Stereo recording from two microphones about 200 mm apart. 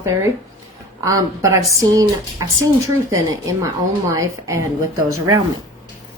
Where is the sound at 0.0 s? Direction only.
15° right (ahead or behind).